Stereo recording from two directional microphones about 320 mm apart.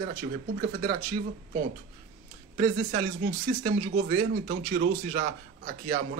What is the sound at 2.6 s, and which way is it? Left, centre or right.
Speech, right.